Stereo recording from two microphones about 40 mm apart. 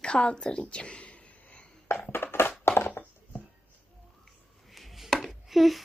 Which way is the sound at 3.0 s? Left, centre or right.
Left.